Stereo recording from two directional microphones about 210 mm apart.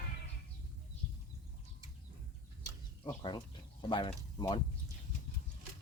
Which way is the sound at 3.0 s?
20° left (ahead or behind).